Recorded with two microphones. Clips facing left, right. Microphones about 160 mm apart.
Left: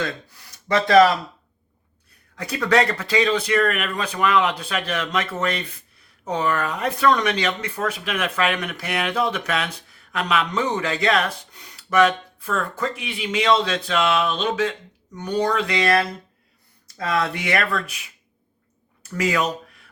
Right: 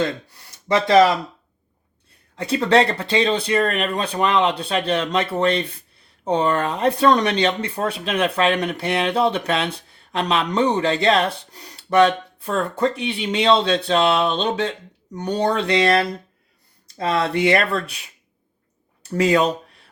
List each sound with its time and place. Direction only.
0.7 s speech: 20° right (ahead or behind)
2.3 s speech: 30° right (ahead or behind)
19.1 s speech: 30° right (ahead or behind)